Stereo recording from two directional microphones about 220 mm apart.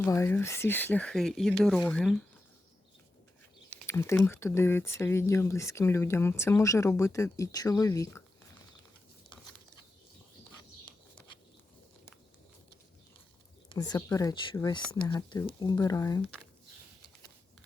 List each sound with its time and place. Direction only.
0.0 s speech: 10° left (ahead or behind)
3.7 s speech: 10° left (ahead or behind)
13.7 s speech: 15° left (ahead or behind)